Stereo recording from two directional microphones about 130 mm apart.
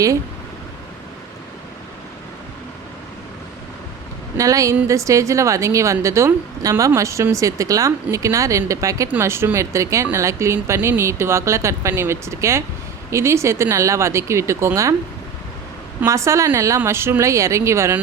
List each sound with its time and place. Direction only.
4.4 s a woman's voice: 25° right (ahead or behind)
16.0 s a woman's voice: 25° right (ahead or behind)